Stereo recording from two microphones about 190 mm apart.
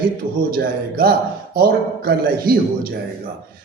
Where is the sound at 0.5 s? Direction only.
50° right (ahead or behind).